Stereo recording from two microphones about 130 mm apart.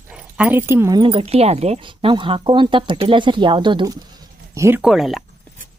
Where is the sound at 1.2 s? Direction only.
50° right (ahead or behind).